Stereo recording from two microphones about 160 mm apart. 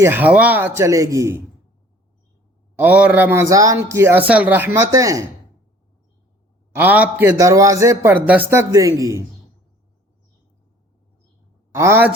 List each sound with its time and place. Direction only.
0.0 s a man's voice: 10° right (ahead or behind)
2.7 s a man's voice: 10° right (ahead or behind)
6.7 s a man's voice: 10° right (ahead or behind)
11.7 s a man's voice: 15° right (ahead or behind)